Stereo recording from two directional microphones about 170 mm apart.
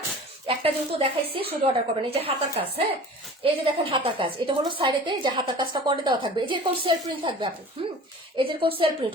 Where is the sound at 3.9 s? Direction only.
30° right (ahead or behind).